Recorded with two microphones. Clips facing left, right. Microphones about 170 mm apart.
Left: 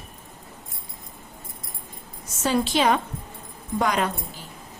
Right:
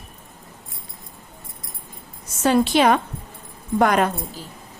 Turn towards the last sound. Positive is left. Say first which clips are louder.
# right 6 dB
turn(degrees=-55)  # may be behind; listen again after turning